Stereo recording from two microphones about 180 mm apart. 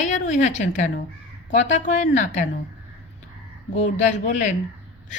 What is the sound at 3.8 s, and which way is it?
Speech, 45° left (ahead or behind).